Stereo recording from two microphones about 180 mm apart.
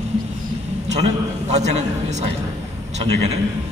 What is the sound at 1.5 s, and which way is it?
Speech, 40° right (ahead or behind).